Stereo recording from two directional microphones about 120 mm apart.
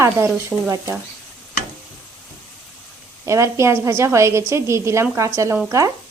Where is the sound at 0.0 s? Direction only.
25° right (ahead or behind).